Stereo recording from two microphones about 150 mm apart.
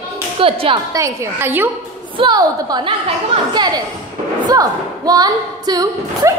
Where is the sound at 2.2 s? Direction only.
25° right (ahead or behind).